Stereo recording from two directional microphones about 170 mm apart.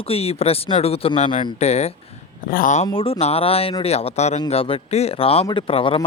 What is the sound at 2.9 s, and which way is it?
Speech, 30° left (ahead or behind).